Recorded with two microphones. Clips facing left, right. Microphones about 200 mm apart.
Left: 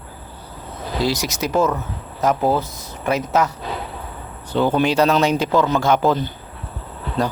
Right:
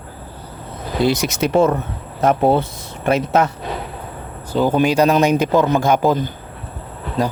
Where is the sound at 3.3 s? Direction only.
55° right (ahead or behind).